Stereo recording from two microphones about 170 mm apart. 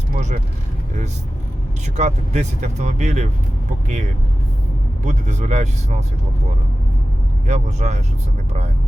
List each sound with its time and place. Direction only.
0.1 s speech: 45° right (ahead or behind)
2.0 s speech: 45° right (ahead or behind)
5.0 s speech: 40° right (ahead or behind)
7.4 s speech: 40° right (ahead or behind)